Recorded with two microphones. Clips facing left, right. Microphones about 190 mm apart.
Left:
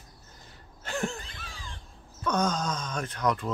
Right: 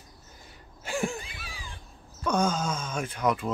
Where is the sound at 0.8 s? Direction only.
10° right (ahead or behind).